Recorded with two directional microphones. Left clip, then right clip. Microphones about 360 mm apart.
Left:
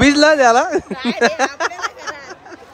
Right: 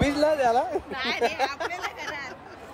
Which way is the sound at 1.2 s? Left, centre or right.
Left.